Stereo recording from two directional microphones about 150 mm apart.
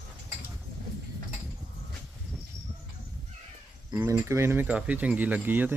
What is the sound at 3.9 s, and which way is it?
Speech, 15° right (ahead or behind).